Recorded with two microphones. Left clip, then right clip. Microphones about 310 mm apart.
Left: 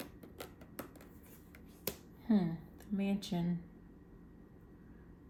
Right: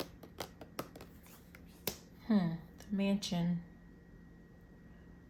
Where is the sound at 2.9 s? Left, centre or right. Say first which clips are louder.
Right 2 dB; right.